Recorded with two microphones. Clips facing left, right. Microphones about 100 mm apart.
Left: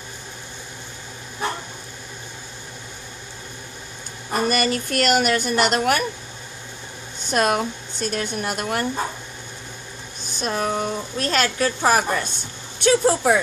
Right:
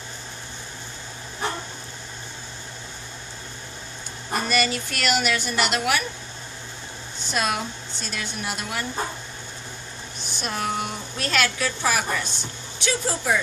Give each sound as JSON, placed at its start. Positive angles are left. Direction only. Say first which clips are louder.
{"t": 4.5, "sound": "a woman's voice", "louder": "left 2 dB", "side_deg": 45}
{"t": 7.2, "sound": "a woman's voice", "louder": "left 6 dB", "side_deg": 50}
{"t": 10.3, "sound": "a woman's voice", "louder": "left 4 dB", "side_deg": 40}
{"t": 12.8, "sound": "speech", "louder": "left 8 dB", "side_deg": 55}